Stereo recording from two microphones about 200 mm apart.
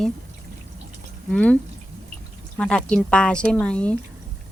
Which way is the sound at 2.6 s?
5° left (ahead or behind).